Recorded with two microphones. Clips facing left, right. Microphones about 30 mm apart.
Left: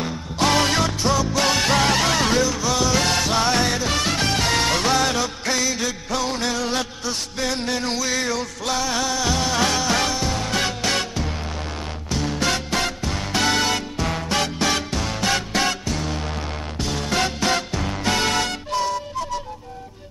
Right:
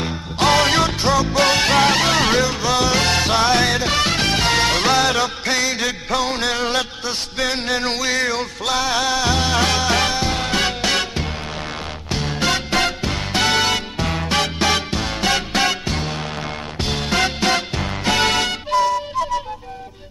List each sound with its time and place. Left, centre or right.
0.4 s music: right
10.5 s music: right
12.1 s music: right
15.2 s music: right
15.9 s music: right
17.1 s music: right